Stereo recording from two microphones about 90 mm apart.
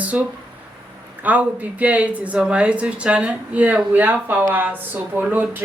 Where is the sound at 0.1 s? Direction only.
15° right (ahead or behind).